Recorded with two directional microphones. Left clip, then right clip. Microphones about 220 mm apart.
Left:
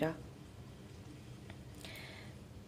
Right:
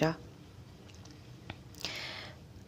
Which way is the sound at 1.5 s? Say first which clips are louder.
Right 11 dB; 25° right (ahead or behind).